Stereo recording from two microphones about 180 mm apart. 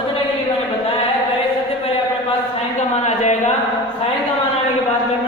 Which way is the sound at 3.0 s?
40° left (ahead or behind).